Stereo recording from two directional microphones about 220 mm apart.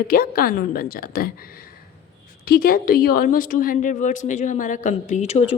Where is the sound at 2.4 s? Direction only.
40° left (ahead or behind).